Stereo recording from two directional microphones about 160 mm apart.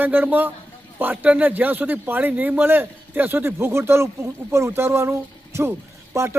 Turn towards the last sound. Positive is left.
turn(degrees=-20)  # may be behind; listen again after turning